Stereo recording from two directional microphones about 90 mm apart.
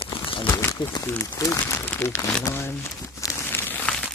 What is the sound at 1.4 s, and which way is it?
Speech, 30° left (ahead or behind).